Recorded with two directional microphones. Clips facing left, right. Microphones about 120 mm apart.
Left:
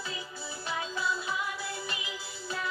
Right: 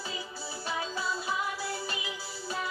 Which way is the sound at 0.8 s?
35° right (ahead or behind).